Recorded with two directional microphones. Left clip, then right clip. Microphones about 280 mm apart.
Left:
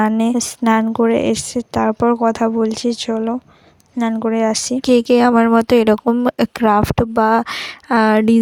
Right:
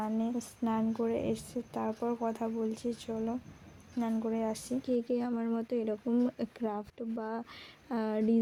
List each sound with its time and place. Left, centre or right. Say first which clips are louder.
0.0 s speech: left 19 dB; left